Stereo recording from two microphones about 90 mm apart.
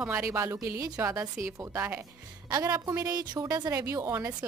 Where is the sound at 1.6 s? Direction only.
25° right (ahead or behind).